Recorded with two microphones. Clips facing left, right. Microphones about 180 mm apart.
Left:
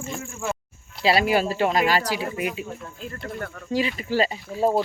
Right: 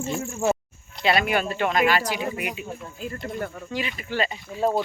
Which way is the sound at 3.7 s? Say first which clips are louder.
Left 8 dB; 35° left (ahead or behind).